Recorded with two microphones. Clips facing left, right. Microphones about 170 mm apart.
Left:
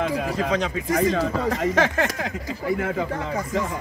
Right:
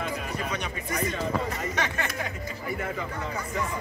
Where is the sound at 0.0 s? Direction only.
90° left.